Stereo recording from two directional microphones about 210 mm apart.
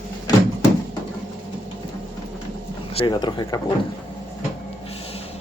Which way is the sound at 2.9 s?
25° left (ahead or behind).